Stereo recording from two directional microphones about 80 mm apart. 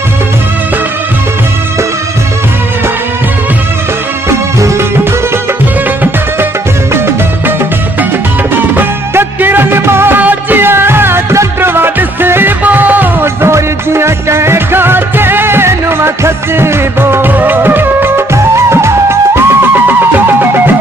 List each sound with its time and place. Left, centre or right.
4.3 s music: right
6.9 s music: right
8.5 s music: right